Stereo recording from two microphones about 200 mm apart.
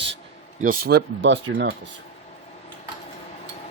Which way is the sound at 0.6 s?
50° right (ahead or behind).